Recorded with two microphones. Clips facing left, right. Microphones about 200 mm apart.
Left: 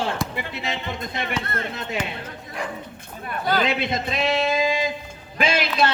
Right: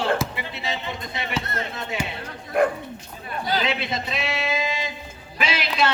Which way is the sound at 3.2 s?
50° left (ahead or behind).